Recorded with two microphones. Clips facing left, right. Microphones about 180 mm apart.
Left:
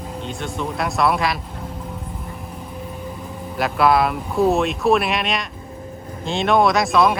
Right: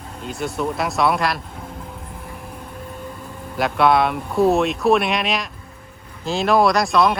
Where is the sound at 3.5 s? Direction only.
Centre (ahead or behind).